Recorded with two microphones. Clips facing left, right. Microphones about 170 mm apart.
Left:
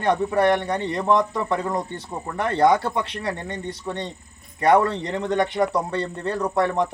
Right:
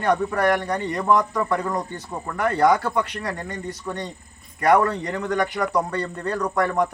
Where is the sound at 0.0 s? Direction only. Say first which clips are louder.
Left 1 dB; 25° left (ahead or behind).